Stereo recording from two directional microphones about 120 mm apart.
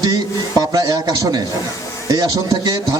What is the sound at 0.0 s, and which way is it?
A man's voice, 30° right (ahead or behind).